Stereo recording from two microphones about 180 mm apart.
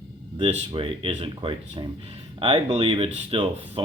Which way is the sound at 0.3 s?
25° right (ahead or behind).